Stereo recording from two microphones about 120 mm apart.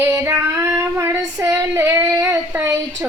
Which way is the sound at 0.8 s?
25° right (ahead or behind).